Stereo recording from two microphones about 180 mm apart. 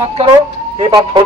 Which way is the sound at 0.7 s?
25° right (ahead or behind).